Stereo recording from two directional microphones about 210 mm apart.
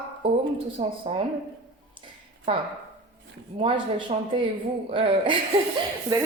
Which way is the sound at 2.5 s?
25° right (ahead or behind).